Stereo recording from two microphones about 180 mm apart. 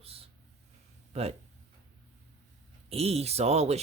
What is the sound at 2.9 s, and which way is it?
Speech, 35° right (ahead or behind).